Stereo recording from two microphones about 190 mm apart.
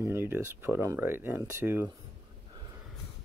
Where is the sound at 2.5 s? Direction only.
25° right (ahead or behind).